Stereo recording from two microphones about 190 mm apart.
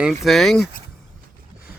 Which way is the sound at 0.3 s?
Centre (ahead or behind).